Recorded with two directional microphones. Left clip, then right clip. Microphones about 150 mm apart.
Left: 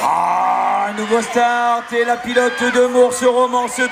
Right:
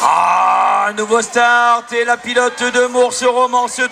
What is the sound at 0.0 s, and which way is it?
Groan, 35° right (ahead or behind).